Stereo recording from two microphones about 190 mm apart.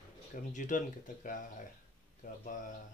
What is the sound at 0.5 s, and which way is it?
Speech, 40° left (ahead or behind).